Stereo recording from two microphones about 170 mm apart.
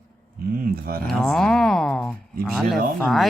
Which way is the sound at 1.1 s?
5° left (ahead or behind).